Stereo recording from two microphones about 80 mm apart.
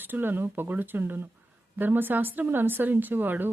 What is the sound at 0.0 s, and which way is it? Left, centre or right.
A woman's voice, right.